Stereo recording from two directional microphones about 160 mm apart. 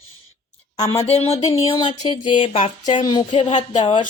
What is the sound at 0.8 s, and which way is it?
Speech, 40° left (ahead or behind).